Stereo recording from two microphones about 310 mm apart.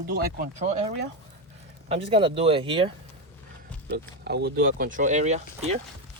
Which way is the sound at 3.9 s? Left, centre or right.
Right.